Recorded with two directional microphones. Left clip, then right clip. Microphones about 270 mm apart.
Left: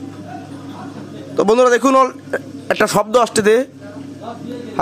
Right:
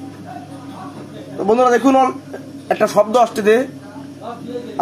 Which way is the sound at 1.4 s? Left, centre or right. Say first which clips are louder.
Left 1 dB; left.